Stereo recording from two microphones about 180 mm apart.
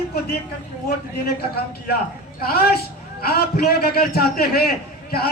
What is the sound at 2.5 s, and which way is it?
A man's voice, 60° left (ahead or behind).